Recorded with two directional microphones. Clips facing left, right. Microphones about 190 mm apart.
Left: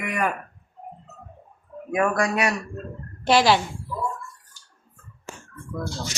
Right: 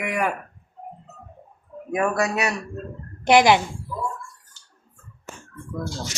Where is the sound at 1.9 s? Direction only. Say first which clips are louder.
Even; 25° right (ahead or behind).